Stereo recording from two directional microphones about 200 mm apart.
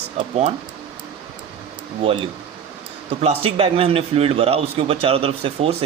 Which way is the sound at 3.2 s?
30° right (ahead or behind).